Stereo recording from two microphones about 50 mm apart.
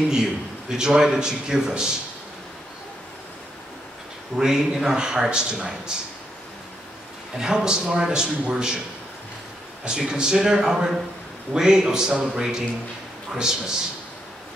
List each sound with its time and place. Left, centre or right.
0.1 s a man's voice: centre
4.4 s a man's voice: centre
7.3 s a man's voice: centre
9.8 s a man's voice: centre